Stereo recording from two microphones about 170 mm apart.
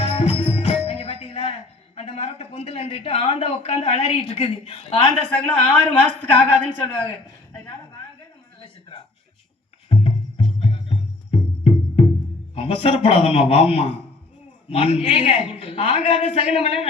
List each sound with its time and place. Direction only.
0.0 s music: 35° left (ahead or behind)
2.0 s a man's voice: 35° left (ahead or behind)
5.3 s speech: 10° left (ahead or behind)
9.9 s music: 35° left (ahead or behind)
12.5 s a man's voice: 35° left (ahead or behind)